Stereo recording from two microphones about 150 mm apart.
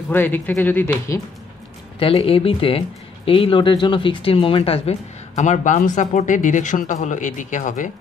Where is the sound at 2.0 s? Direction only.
40° left (ahead or behind).